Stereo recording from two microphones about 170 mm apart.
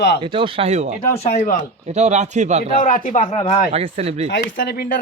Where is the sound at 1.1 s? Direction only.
40° left (ahead or behind).